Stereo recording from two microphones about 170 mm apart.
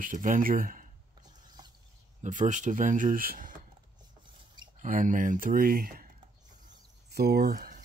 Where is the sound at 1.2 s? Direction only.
25° right (ahead or behind).